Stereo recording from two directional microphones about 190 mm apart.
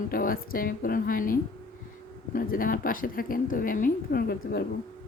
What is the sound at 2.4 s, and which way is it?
Speech, 45° left (ahead or behind).